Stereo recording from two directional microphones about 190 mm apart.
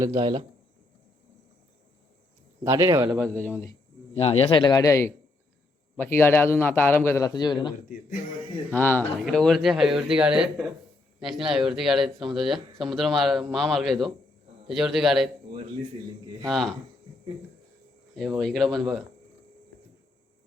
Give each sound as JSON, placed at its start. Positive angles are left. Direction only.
{"t": 0.0, "sound": "speech", "side_deg": -20}
{"t": 2.6, "sound": "a man's voice", "side_deg": -15}
{"t": 3.1, "sound": "a man's voice", "side_deg": 5}
{"t": 4.1, "sound": "a man's voice", "side_deg": 30}
{"t": 8.7, "sound": "a man's voice", "side_deg": 10}
{"t": 16.5, "sound": "speech", "side_deg": 0}
{"t": 18.3, "sound": "speech", "side_deg": 0}